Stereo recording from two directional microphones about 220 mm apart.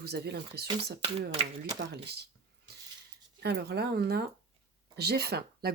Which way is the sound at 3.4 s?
45° right (ahead or behind).